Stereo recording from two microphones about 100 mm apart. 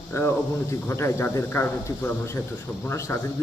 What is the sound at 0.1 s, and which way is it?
A man's voice, 25° left (ahead or behind).